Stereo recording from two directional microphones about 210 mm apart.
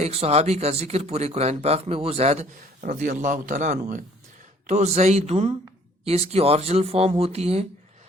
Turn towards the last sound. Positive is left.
turn(degrees=-30)  # may be behind; listen again after turning